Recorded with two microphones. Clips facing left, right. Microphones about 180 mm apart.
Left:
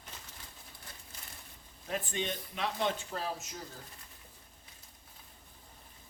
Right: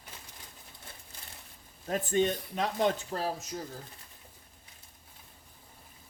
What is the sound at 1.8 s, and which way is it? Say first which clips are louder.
Speech: right 8 dB; 45° right (ahead or behind).